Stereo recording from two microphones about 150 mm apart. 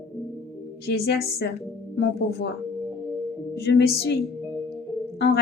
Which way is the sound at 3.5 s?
90° left.